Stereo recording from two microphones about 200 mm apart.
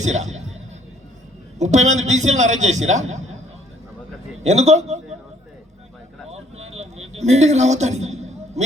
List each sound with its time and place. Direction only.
0.0 s speech: 35° right (ahead or behind)
1.5 s a man's voice: 35° right (ahead or behind)
4.4 s a man's voice: 35° right (ahead or behind)
6.3 s a sound: 35° right (ahead or behind)
7.2 s a man's voice: 35° right (ahead or behind)